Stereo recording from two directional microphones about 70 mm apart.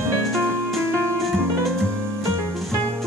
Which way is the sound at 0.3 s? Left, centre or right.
Centre.